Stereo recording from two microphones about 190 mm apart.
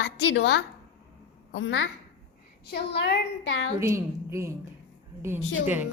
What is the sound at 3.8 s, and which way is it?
Speech, 15° right (ahead or behind).